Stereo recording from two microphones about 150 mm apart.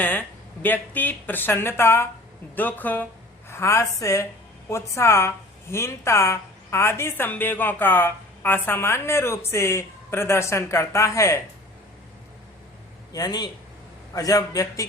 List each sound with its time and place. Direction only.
0.0 s a woman's voice: 10° left (ahead or behind)
13.1 s a woman's voice: 25° left (ahead or behind)